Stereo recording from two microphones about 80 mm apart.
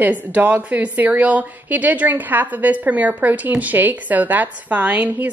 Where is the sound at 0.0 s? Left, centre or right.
Right.